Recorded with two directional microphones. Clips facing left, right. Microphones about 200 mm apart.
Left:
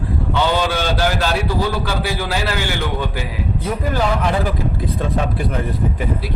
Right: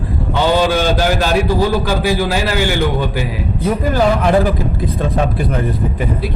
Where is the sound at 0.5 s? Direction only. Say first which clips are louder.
Right 5 dB; 10° right (ahead or behind).